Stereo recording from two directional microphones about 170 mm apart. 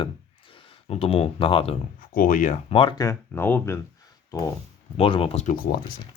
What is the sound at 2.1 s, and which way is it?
Speech, 55° left (ahead or behind).